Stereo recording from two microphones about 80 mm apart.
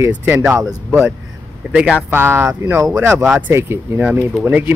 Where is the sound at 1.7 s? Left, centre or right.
Centre.